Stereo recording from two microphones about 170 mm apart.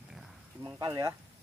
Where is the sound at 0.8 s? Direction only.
20° right (ahead or behind).